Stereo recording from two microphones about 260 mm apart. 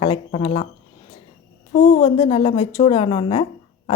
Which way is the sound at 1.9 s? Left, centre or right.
Left.